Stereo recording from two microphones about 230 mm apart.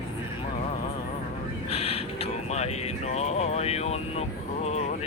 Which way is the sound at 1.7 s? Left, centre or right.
Left.